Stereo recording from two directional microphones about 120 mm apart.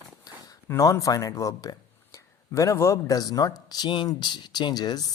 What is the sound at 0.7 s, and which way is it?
Speech, 30° left (ahead or behind).